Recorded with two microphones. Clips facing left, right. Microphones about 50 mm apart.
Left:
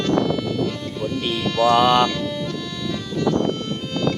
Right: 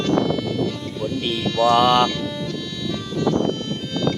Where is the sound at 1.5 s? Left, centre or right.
Left.